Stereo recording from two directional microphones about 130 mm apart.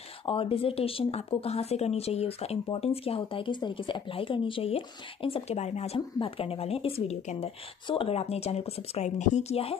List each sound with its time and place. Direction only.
0.2 s speech: 45° left (ahead or behind)
5.9 s speech: 40° left (ahead or behind)